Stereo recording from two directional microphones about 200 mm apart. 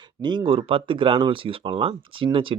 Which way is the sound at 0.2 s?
20° right (ahead or behind).